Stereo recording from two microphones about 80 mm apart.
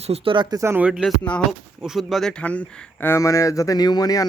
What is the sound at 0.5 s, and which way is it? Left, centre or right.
Speech, right.